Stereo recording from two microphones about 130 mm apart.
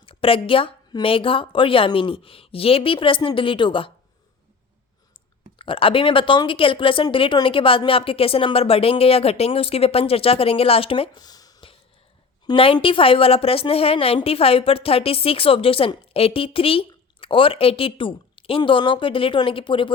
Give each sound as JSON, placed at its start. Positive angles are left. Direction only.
{"t": 0.0, "sound": "a woman's voice", "side_deg": 45}
{"t": 5.5, "sound": "a woman's voice", "side_deg": 40}
{"t": 12.5, "sound": "a woman's voice", "side_deg": 40}